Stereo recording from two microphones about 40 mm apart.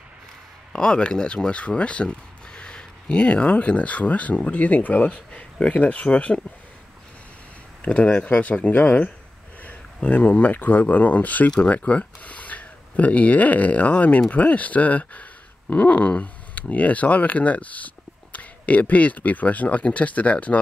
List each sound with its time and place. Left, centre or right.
0.7 s speech: left
7.8 s speech: left